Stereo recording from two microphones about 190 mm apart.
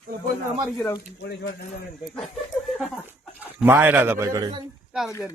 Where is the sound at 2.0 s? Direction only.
Centre (ahead or behind).